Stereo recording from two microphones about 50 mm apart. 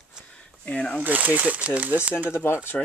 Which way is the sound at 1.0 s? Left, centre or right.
Right.